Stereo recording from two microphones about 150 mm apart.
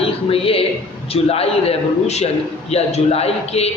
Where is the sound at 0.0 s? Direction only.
40° left (ahead or behind).